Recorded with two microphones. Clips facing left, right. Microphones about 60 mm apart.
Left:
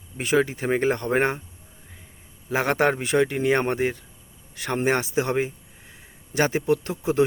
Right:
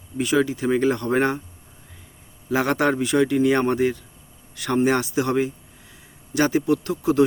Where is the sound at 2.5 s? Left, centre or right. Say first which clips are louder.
Right 1 dB; left.